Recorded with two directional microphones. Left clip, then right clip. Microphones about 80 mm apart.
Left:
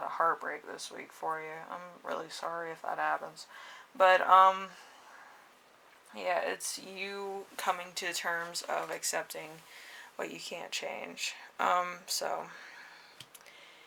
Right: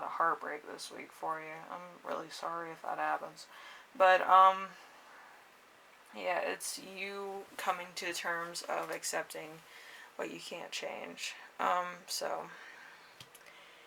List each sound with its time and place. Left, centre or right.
0.0 s speech: left
6.1 s speech: left